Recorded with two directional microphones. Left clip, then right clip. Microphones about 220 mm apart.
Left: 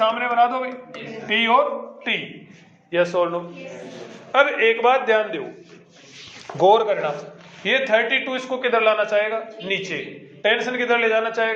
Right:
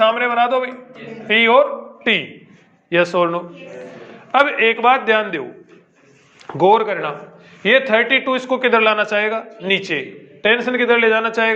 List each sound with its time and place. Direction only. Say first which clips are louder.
0.0 s a sound: right 3 dB; 50° right (ahead or behind)
1.3 s a man's voice: right 5 dB; 50° right (ahead or behind)
2.9 s a man's voice: right 4 dB; 50° right (ahead or behind)
6.5 s a man's voice: right 2 dB; 45° right (ahead or behind)